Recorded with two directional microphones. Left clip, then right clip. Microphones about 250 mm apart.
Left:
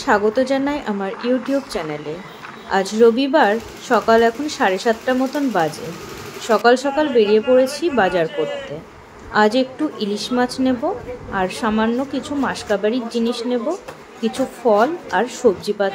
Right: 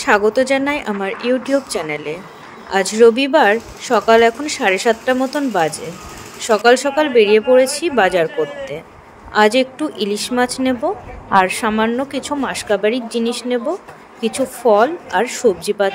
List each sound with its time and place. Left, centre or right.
0.0 s speech: right